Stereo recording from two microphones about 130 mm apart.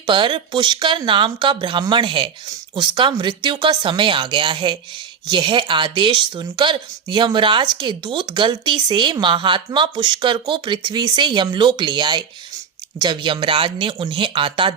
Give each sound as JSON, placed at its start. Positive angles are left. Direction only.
{"t": 0.0, "sound": "speech", "side_deg": -40}